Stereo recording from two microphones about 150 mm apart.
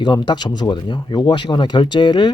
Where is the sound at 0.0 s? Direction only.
30° left (ahead or behind).